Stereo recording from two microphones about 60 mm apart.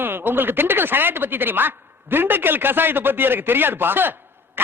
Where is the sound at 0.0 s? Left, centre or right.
Right.